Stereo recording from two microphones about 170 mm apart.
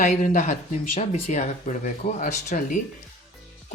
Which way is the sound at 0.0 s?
45° left (ahead or behind).